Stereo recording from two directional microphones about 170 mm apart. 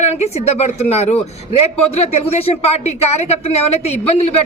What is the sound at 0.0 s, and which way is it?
Speech, 40° left (ahead or behind).